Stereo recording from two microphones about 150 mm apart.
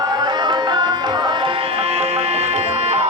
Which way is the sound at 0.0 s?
30° right (ahead or behind).